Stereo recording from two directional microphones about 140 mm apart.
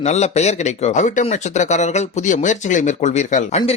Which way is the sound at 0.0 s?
50° left (ahead or behind).